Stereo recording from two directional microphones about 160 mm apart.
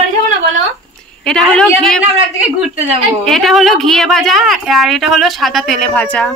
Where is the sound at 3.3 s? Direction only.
Centre (ahead or behind).